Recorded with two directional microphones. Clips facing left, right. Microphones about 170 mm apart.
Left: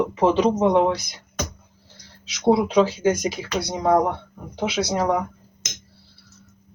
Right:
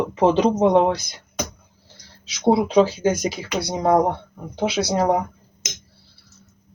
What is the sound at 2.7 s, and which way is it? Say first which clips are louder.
Speech: right 2 dB; 30° right (ahead or behind).